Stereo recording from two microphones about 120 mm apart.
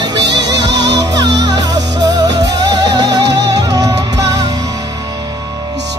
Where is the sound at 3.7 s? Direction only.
30° right (ahead or behind).